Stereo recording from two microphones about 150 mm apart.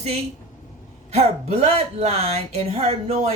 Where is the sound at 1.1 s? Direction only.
45° right (ahead or behind).